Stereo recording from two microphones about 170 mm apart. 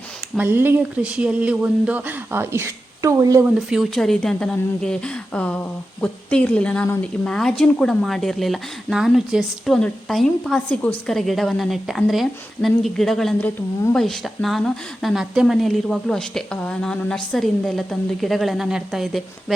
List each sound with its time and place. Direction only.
0.3 s speech: 10° right (ahead or behind)
3.7 s speech: centre (ahead or behind)